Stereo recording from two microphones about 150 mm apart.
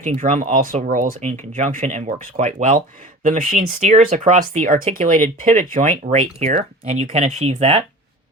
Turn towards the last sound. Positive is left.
turn(degrees=-45)  # may be behind; listen again after turning